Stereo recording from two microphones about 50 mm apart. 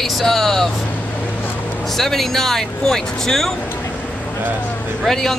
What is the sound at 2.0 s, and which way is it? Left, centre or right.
Speech, centre.